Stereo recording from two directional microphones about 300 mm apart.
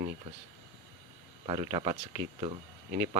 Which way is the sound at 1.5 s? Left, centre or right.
Centre.